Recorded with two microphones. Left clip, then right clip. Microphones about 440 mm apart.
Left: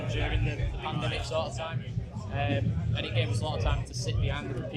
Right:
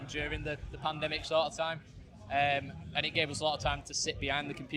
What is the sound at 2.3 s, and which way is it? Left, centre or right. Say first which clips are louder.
Speech: right 3 dB; right.